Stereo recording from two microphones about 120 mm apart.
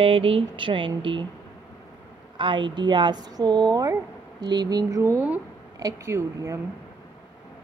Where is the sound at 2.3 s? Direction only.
40° right (ahead or behind); by 6.6 s 25° right (ahead or behind).